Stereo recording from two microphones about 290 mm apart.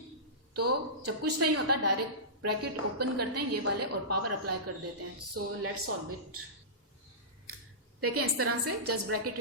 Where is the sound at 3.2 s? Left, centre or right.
Right.